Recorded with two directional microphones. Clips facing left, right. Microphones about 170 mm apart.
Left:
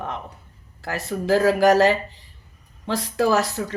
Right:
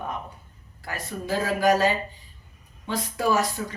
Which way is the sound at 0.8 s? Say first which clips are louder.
Left 6 dB; 80° left.